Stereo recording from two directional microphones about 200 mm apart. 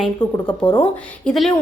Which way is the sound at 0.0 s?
10° left (ahead or behind).